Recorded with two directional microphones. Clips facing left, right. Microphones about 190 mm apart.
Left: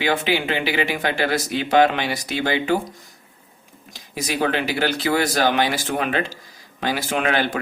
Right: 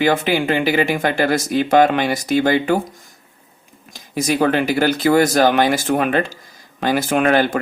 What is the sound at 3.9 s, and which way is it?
Speech, 45° right (ahead or behind).